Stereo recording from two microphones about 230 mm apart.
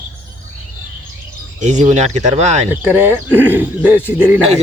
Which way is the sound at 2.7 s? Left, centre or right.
Centre.